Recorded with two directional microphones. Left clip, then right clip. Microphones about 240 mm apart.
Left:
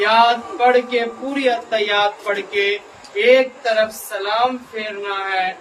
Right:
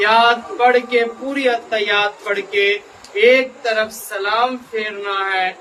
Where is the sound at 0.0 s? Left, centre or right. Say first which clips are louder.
Right 1 dB; centre.